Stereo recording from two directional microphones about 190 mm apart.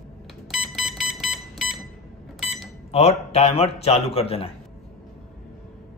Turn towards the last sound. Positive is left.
turn(degrees=30)  # may be behind; listen again after turning